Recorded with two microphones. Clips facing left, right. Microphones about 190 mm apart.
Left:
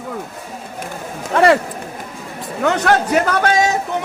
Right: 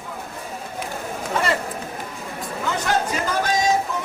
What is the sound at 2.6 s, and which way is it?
A man's voice, 70° left (ahead or behind).